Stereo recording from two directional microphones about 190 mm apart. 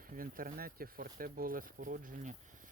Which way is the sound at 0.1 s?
50° right (ahead or behind).